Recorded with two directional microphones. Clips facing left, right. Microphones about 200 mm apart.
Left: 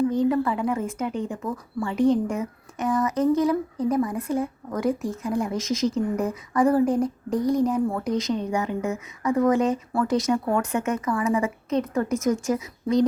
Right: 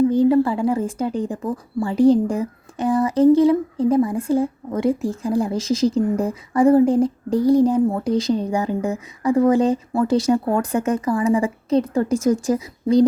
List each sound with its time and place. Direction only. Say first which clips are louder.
0.1 s a woman's voice: right 6 dB; 30° right (ahead or behind)